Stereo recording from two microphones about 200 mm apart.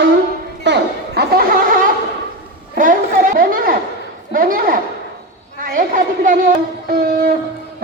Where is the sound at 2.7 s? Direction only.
45° right (ahead or behind).